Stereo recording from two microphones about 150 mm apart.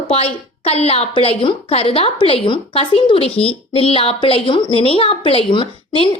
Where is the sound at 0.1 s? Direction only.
40° left (ahead or behind).